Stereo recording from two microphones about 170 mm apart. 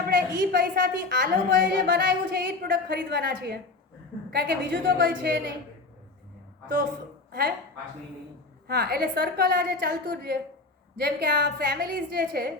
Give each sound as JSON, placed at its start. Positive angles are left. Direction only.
{"t": 0.1, "sound": "a woman's voice", "side_deg": -60}
{"t": 7.3, "sound": "a woman's voice", "side_deg": -65}
{"t": 8.6, "sound": "a woman's voice", "side_deg": -65}